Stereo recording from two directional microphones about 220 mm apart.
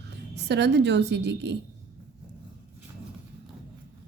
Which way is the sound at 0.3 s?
50° right (ahead or behind).